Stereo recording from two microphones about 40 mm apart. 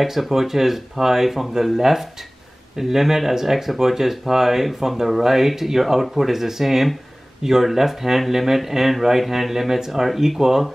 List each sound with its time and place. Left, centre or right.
0.0 s speech: centre